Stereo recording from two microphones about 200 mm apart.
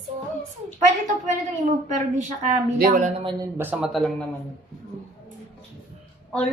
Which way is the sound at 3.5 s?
10° right (ahead or behind).